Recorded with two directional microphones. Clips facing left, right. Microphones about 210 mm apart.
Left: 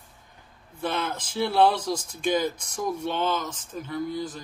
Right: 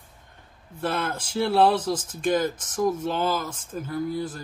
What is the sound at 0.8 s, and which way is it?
Speech, 5° right (ahead or behind).